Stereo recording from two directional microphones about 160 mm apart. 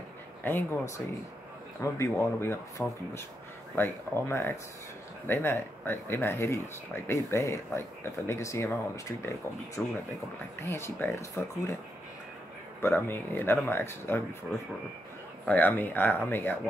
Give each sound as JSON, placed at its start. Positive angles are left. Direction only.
{"t": 0.4, "sound": "speech", "side_deg": 15}
{"t": 3.7, "sound": "speech", "side_deg": 15}
{"t": 9.8, "sound": "speech", "side_deg": 5}
{"t": 12.8, "sound": "speech", "side_deg": 15}
{"t": 15.4, "sound": "speech", "side_deg": 10}